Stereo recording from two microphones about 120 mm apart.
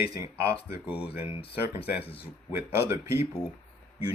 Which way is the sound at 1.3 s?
50° left (ahead or behind).